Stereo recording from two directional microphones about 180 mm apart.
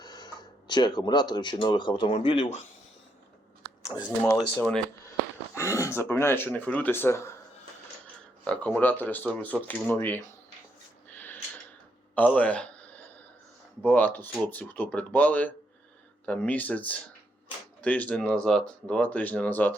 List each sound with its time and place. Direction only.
0.0 s speech: 20° left (ahead or behind)
4.2 s speech: 5° left (ahead or behind)
5.5 s speech: 15° left (ahead or behind)
8.4 s speech: 10° left (ahead or behind)
12.1 s a sound: 10° left (ahead or behind)
13.8 s speech: 10° left (ahead or behind)